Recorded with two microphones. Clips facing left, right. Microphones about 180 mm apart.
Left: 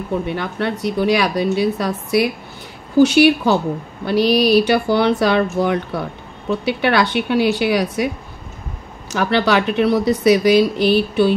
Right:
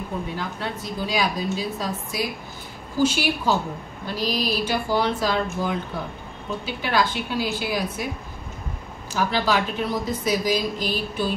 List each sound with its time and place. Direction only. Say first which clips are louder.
0.3 s speech: left 8 dB; 70° left (ahead or behind)
9.1 s speech: left 6 dB; 70° left (ahead or behind)